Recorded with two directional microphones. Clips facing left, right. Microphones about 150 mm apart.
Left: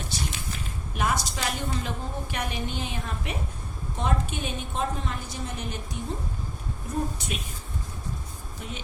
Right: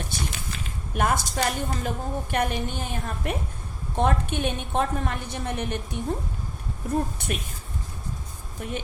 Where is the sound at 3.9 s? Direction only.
60° right (ahead or behind).